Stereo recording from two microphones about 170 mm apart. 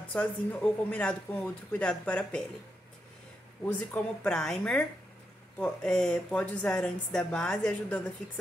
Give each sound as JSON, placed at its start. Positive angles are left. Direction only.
{"t": 0.1, "sound": "speech", "side_deg": 5}
{"t": 3.6, "sound": "speech", "side_deg": 5}